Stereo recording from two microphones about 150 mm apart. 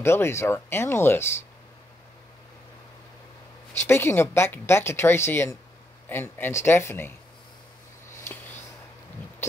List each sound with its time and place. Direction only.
0.0 s speech: 15° left (ahead or behind)
3.7 s speech: 15° left (ahead or behind)
8.2 s a sound: 15° left (ahead or behind)